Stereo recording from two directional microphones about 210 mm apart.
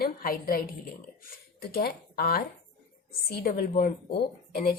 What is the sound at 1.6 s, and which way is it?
Speech, 45° left (ahead or behind).